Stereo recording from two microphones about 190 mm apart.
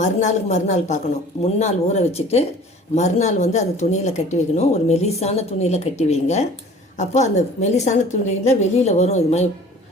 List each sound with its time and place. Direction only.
0.0 s speech: 40° left (ahead or behind)